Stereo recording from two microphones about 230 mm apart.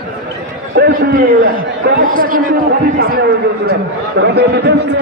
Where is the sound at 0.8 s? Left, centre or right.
Right.